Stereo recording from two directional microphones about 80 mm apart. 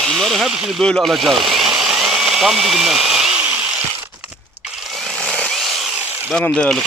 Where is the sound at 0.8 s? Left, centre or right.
Centre.